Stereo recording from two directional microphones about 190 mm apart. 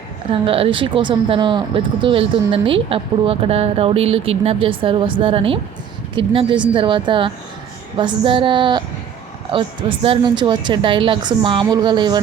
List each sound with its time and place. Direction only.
0.3 s speech: 30° right (ahead or behind)